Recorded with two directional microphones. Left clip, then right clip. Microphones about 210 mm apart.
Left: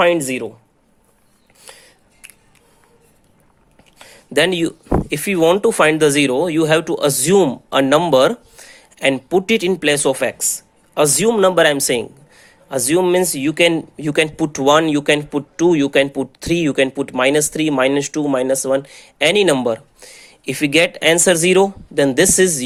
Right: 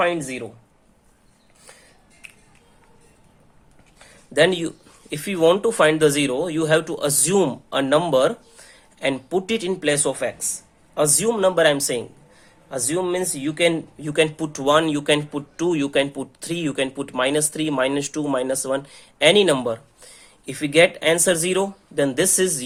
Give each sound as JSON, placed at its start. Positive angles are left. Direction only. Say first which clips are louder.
{"t": 0.0, "sound": "speech", "louder": "left 7 dB", "side_deg": 40}
{"t": 3.9, "sound": "speech", "louder": "left 2 dB", "side_deg": 35}